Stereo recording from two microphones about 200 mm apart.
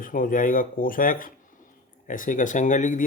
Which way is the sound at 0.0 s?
45° left (ahead or behind).